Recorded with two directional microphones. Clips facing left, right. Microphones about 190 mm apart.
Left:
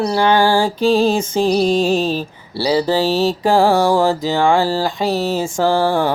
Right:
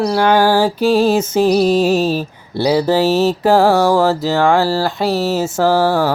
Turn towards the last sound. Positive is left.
turn(degrees=-5)  # may be behind; listen again after turning